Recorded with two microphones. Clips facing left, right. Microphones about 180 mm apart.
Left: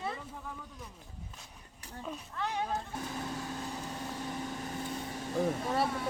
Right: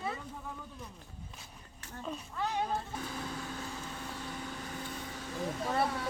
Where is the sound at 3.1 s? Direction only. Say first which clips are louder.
Left 2 dB; 20° left (ahead or behind).